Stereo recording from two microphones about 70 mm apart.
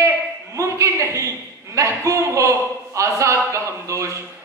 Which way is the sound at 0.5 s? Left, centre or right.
Right.